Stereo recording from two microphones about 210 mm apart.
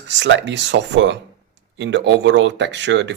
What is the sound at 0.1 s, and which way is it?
Speech, 60° right (ahead or behind).